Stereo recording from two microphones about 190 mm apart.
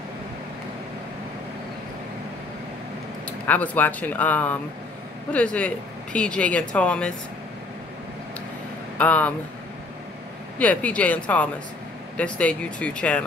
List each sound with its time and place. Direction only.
3.3 s speech: 10° left (ahead or behind)
8.9 s speech: 5° left (ahead or behind)
10.6 s speech: 5° left (ahead or behind)